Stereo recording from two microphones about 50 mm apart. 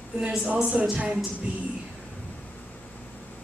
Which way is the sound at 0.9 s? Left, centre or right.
Centre.